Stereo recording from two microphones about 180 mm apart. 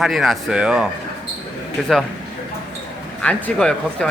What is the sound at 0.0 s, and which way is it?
Speech, centre (ahead or behind).